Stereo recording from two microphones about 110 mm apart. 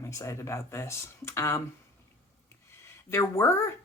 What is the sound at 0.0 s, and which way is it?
Speech, 25° left (ahead or behind).